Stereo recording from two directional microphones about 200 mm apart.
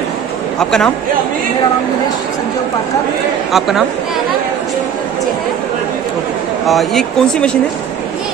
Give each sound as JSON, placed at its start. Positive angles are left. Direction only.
{"t": 0.6, "sound": "speech", "side_deg": 5}
{"t": 3.5, "sound": "speech", "side_deg": 0}
{"t": 6.7, "sound": "speech", "side_deg": 0}